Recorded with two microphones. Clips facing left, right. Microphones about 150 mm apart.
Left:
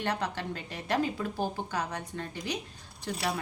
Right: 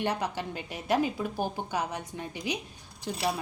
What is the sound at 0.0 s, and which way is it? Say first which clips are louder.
A woman's voice: right 2 dB; 15° right (ahead or behind).